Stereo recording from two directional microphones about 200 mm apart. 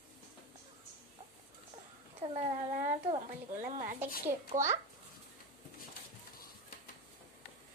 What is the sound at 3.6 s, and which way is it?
Speech, 45° right (ahead or behind).